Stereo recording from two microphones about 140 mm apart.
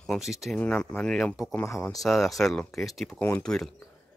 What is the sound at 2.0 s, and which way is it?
Speech, centre (ahead or behind).